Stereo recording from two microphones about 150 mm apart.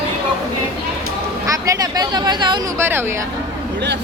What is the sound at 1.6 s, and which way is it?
Speech, 25° right (ahead or behind).